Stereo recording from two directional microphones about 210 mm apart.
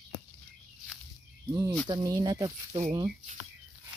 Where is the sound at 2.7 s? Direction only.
30° right (ahead or behind).